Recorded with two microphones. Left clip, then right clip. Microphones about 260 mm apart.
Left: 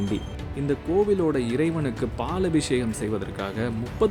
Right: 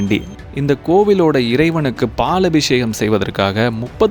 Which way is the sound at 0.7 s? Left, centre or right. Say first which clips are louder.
Right 10 dB; right.